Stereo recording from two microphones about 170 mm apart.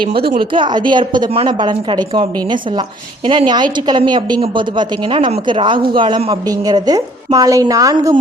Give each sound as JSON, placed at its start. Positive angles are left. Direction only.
{"t": 0.3, "sound": "a woman's voice", "side_deg": -30}